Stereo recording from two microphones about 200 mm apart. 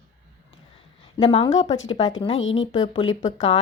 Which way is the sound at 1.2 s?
30° left (ahead or behind).